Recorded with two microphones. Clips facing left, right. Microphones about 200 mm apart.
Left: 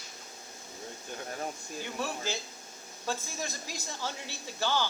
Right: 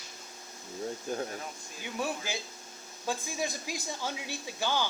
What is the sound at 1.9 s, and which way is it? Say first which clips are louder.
Speech: right 2 dB; 15° right (ahead or behind).